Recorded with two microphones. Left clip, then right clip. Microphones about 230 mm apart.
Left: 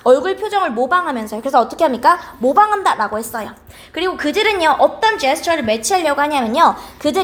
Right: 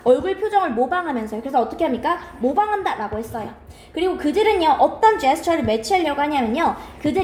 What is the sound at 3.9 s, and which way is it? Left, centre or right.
Speech, left.